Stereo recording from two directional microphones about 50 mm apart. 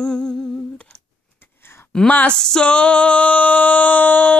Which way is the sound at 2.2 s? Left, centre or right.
Centre.